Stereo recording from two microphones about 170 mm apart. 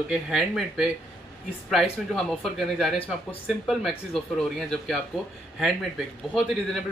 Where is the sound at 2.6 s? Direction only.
Centre (ahead or behind).